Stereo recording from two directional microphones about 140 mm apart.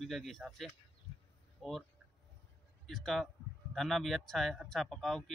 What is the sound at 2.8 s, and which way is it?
Speech, centre (ahead or behind).